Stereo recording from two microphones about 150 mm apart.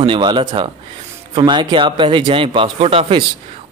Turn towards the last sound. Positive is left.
turn(degrees=-35)  # may be behind; listen again after turning